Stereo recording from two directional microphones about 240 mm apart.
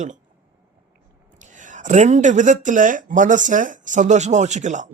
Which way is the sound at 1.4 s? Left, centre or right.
Right.